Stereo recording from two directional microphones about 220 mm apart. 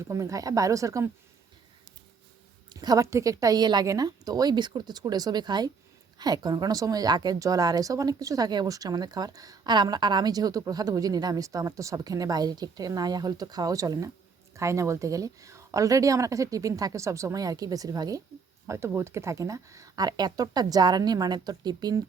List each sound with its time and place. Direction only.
0.0 s speech: 15° right (ahead or behind)
2.6 s speech: 15° right (ahead or behind)